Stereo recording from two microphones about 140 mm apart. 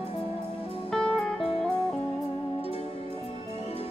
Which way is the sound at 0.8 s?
5° left (ahead or behind).